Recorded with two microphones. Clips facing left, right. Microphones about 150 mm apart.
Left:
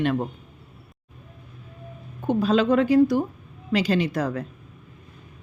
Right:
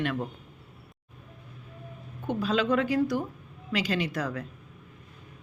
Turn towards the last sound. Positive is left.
turn(degrees=30)  # may be behind; listen again after turning